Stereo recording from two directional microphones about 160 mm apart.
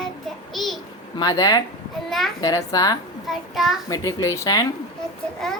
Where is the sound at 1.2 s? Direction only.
25° left (ahead or behind).